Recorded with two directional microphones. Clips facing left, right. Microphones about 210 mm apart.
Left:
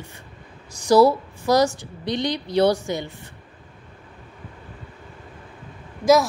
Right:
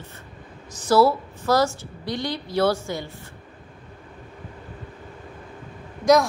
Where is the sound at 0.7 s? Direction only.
15° left (ahead or behind).